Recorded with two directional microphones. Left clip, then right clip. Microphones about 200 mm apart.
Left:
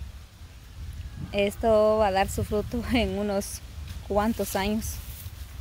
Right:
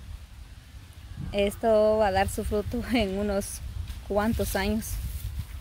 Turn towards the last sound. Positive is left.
turn(degrees=0)  # may be behind; listen again after turning